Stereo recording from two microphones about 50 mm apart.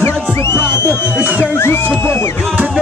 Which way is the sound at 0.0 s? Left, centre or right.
Left.